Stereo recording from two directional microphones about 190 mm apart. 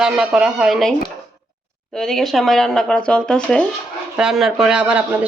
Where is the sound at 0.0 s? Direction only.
5° right (ahead or behind).